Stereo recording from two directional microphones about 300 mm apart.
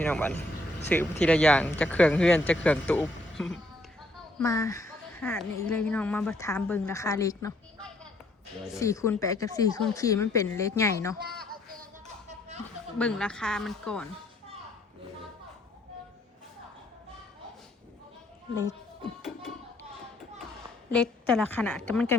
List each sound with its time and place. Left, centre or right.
0.0 s a woman's voice: centre
11.3 s a sound: right
13.0 s speech: centre
20.9 s speech: centre